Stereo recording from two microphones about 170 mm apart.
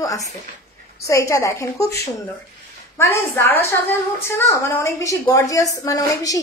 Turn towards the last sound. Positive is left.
turn(degrees=20)  # may be behind; listen again after turning